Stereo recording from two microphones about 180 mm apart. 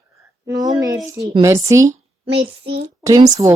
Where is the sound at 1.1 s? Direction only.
15° right (ahead or behind).